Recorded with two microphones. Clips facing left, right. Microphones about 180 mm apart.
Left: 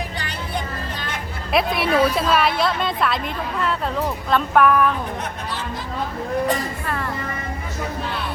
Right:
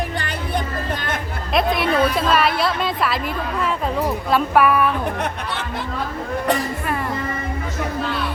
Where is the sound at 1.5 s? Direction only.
Centre (ahead or behind).